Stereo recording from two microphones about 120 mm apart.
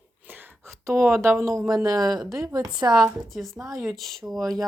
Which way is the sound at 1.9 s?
Centre (ahead or behind).